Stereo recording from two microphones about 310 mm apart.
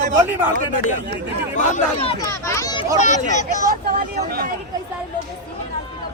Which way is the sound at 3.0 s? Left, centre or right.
Left.